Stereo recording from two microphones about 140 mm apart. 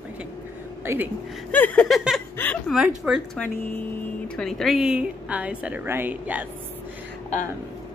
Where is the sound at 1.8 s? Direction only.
Centre (ahead or behind).